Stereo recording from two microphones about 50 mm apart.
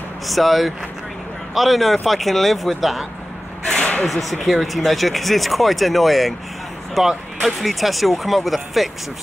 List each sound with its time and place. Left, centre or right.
0.3 s speech: centre
3.7 s a sound: left
4.0 s speech: centre